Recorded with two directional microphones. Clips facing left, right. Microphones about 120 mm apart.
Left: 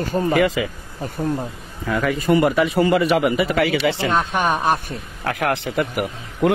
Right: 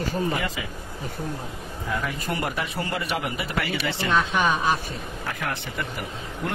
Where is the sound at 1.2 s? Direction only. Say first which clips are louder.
Left 10 dB; 35° left (ahead or behind).